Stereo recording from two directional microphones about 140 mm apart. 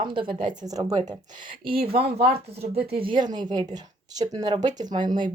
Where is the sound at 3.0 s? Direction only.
35° right (ahead or behind).